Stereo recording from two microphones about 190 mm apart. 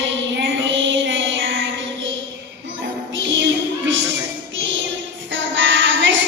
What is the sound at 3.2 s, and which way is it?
Music, 80° right.